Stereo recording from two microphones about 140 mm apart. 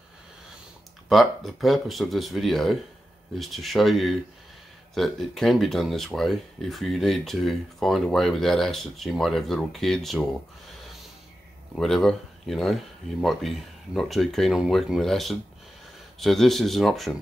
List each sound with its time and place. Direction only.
1.0 s speech: centre (ahead or behind)
11.8 s speech: 5° left (ahead or behind)